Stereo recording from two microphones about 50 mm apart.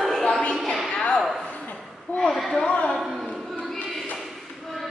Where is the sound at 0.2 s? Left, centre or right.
Centre.